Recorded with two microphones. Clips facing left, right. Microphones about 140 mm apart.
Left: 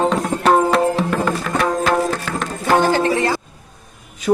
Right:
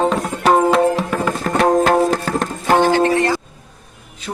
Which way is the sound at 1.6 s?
40° right (ahead or behind).